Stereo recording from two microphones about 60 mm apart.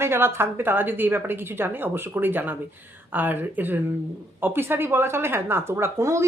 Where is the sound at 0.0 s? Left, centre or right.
Right.